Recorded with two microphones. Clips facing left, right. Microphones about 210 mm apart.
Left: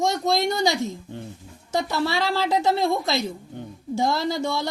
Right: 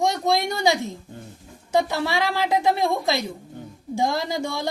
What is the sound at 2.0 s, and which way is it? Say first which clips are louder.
Speech: even; 15° right (ahead or behind).